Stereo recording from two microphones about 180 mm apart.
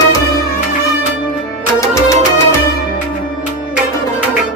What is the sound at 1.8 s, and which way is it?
Music, 15° left (ahead or behind).